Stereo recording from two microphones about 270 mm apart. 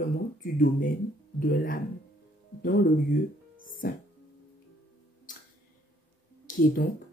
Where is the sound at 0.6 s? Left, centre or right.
Left.